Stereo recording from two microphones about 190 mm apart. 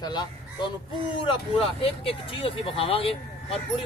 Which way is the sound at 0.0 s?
20° left (ahead or behind).